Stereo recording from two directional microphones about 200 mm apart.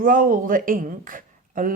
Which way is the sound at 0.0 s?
40° right (ahead or behind).